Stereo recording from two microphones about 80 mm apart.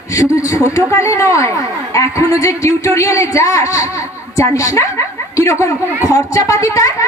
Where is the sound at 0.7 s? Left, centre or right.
Left.